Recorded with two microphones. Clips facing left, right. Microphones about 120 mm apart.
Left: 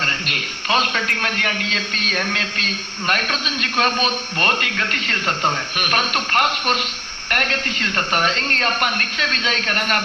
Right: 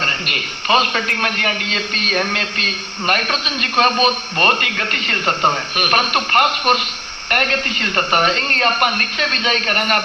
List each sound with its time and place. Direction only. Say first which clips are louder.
0.7 s a woman's voice: right 4 dB; 50° right (ahead or behind)